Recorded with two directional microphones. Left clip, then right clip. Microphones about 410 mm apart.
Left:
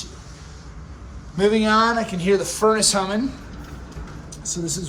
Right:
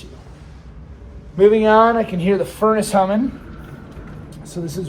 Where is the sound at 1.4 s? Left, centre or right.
Centre.